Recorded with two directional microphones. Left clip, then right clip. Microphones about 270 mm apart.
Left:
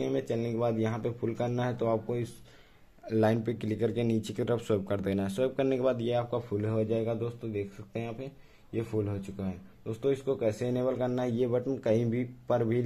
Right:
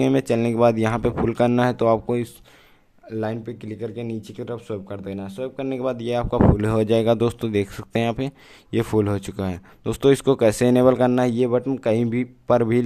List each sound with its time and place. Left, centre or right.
0.0 s speech: right
3.1 s speech: centre
6.5 s speech: right